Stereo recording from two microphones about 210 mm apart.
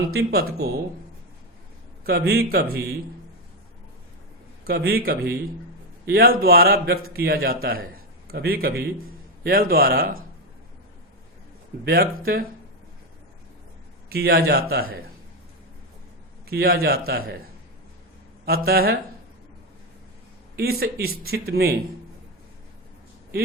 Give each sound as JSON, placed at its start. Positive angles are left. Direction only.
{"t": 0.1, "sound": "a man's voice", "side_deg": -50}
{"t": 2.0, "sound": "a man's voice", "side_deg": -45}
{"t": 4.6, "sound": "a man's voice", "side_deg": -50}
{"t": 11.9, "sound": "a man's voice", "side_deg": -45}
{"t": 14.1, "sound": "a man's voice", "side_deg": -50}
{"t": 16.5, "sound": "a man's voice", "side_deg": -45}
{"t": 18.4, "sound": "a man's voice", "side_deg": -45}
{"t": 20.6, "sound": "a man's voice", "side_deg": -45}